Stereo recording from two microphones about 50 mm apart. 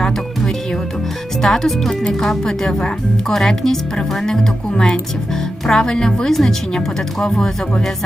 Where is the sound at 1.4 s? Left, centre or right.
Centre.